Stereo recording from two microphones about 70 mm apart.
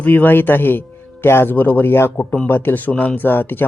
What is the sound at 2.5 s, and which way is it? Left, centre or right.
Speech, left.